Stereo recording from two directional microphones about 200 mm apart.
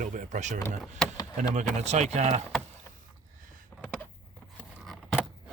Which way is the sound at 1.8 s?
35° right (ahead or behind).